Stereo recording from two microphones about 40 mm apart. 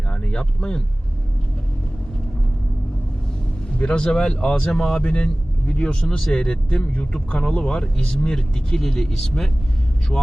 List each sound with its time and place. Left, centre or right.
0.1 s speech: left
3.8 s speech: left